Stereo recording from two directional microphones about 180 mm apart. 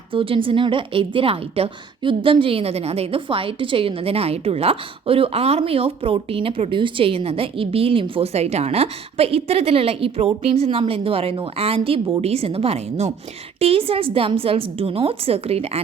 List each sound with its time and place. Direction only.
0.1 s a woman's voice: 30° right (ahead or behind)